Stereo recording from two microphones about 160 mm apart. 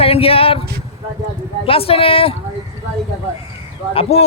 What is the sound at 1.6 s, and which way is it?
Speech, 35° left (ahead or behind).